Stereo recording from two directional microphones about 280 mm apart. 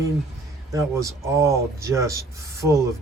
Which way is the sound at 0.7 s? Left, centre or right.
Centre.